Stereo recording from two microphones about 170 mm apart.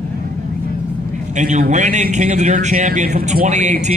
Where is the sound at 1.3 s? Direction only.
45° right (ahead or behind).